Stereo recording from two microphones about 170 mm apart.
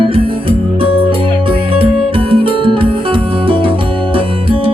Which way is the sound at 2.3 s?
30° right (ahead or behind).